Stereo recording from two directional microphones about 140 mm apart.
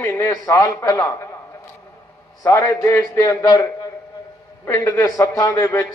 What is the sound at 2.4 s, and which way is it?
A man's voice, 20° left (ahead or behind).